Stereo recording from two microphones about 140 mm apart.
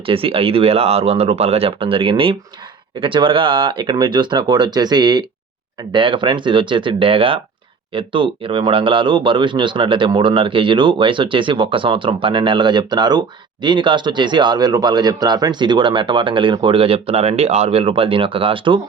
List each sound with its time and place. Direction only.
0.0 s speech: 40° right (ahead or behind)